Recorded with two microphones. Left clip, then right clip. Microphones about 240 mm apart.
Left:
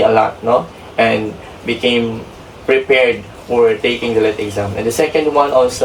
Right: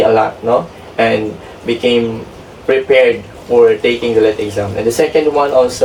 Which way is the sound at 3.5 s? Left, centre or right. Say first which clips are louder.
Right 3 dB; left.